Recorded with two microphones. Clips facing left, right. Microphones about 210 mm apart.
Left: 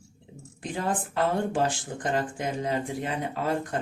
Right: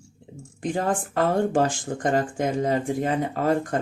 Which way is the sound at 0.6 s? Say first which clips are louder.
Right 5 dB; 45° right (ahead or behind).